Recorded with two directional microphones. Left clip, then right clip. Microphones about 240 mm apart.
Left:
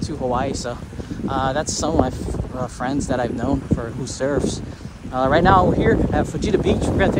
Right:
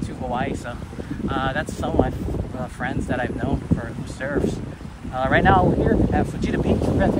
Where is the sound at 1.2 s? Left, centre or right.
Left.